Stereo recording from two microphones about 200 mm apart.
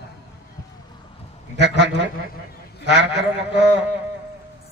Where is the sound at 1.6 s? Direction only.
60° right (ahead or behind).